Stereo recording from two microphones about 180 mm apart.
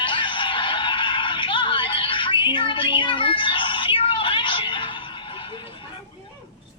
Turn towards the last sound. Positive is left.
turn(degrees=30)  # may be behind; listen again after turning